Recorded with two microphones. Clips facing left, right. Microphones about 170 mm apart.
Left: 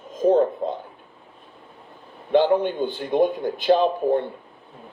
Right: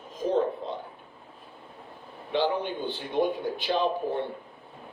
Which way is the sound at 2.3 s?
45° left (ahead or behind).